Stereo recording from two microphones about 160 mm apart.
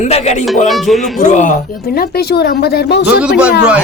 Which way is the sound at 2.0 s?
80° left.